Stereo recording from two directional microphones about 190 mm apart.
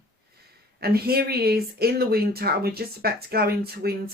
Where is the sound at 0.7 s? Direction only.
55° right (ahead or behind).